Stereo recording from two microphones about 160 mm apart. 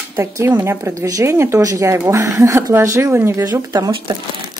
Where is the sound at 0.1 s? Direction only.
15° right (ahead or behind).